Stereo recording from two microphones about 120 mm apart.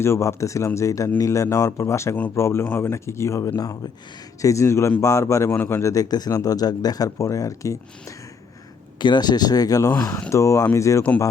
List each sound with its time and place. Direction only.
0.0 s speech: 20° left (ahead or behind)
9.0 s speech: 40° left (ahead or behind)
9.9 s speech: 20° left (ahead or behind)